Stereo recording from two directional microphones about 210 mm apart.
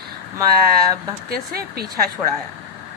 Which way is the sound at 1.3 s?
45° right (ahead or behind).